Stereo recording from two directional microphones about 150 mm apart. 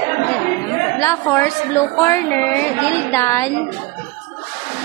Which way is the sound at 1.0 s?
15° left (ahead or behind).